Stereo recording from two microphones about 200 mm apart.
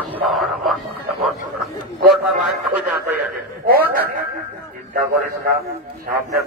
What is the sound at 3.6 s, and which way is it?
Speech, 50° right (ahead or behind).